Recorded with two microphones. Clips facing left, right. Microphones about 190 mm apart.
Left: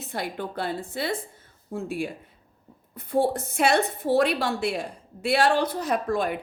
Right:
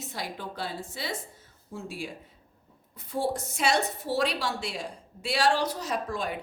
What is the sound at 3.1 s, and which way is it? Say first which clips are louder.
A woman's voice: left 6 dB; 55° left (ahead or behind).